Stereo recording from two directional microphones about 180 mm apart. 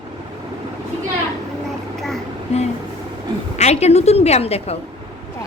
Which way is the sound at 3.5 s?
40° left (ahead or behind).